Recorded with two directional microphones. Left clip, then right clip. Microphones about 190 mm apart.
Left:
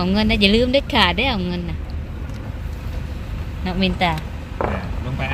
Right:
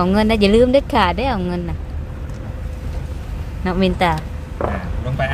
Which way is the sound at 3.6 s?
20° right (ahead or behind).